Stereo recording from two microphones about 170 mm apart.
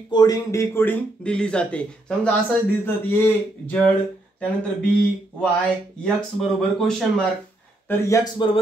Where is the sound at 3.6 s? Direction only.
10° left (ahead or behind).